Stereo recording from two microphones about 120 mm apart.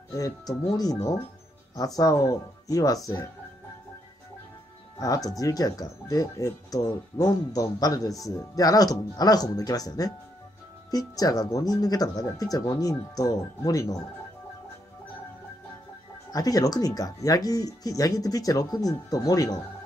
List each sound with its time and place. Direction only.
0.1 s speech: 30° left (ahead or behind)
4.9 s speech: 30° left (ahead or behind)
16.3 s speech: 30° left (ahead or behind)